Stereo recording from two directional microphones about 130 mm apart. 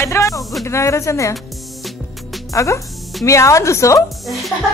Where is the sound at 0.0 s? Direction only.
20° left (ahead or behind).